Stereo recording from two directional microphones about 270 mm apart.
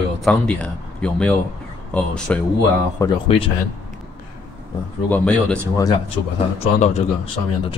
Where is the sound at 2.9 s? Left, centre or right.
Centre.